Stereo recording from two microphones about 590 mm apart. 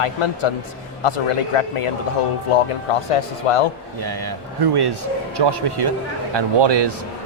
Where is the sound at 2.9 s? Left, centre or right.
Left.